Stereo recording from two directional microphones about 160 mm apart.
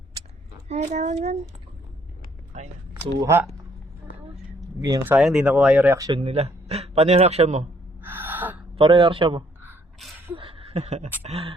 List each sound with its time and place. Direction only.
0.7 s speech: 45° right (ahead or behind)
2.9 s speech: 15° right (ahead or behind)
4.8 s speech: 20° right (ahead or behind)
5.1 s speech: 5° right (ahead or behind)
6.1 s a man's voice: 40° right (ahead or behind)
8.0 s gasp: 10° right (ahead or behind)
8.7 s a man's voice: 30° right (ahead or behind)
10.3 s a sound: 35° right (ahead or behind)
11.2 s a man's voice: 40° right (ahead or behind)